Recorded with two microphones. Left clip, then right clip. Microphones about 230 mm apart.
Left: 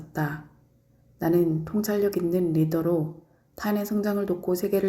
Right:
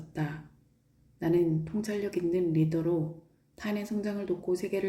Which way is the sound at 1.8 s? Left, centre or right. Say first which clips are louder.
Left 7 dB; centre.